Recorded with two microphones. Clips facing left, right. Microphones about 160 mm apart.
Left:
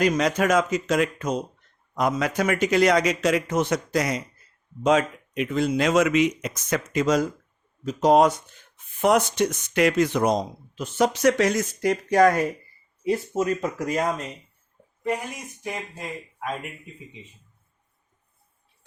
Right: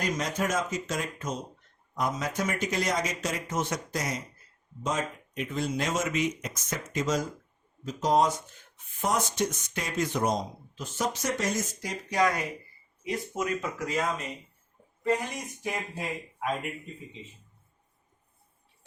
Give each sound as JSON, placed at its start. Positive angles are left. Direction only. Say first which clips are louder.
{"t": 0.0, "sound": "speech", "louder": "left 8 dB", "side_deg": 75}
{"t": 13.1, "sound": "speech", "louder": "left 7 dB", "side_deg": 30}
{"t": 15.3, "sound": "speech", "louder": "left 1 dB", "side_deg": 0}